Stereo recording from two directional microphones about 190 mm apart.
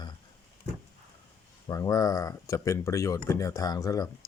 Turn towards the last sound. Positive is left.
turn(degrees=20)  # may be behind; listen again after turning